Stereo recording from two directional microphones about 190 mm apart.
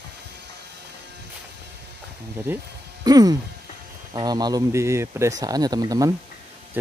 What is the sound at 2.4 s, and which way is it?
Speech, 15° right (ahead or behind).